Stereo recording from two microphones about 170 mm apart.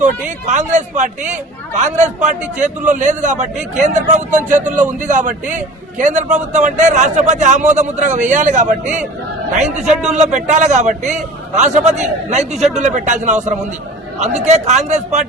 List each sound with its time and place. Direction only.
0.0 s a man's voice: 45° right (ahead or behind)